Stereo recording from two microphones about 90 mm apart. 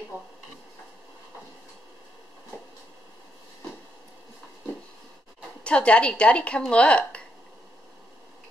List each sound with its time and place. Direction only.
5.6 s a woman's voice: 10° left (ahead or behind)